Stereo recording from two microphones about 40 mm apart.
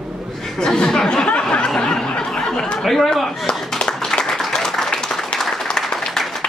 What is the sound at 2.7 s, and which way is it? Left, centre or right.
Speech, centre.